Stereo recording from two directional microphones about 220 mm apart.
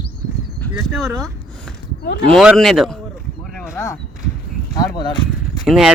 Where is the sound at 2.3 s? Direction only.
Centre (ahead or behind).